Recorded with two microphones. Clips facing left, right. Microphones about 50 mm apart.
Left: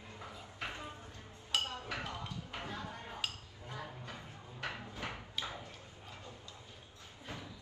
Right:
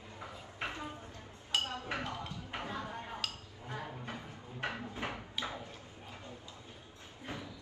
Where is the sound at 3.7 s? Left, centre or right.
Right.